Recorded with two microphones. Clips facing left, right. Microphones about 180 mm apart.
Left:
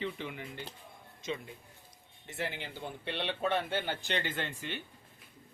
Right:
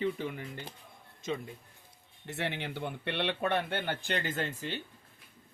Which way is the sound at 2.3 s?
70° right (ahead or behind).